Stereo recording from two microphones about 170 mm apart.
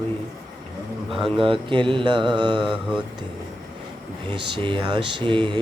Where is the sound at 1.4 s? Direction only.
30° right (ahead or behind).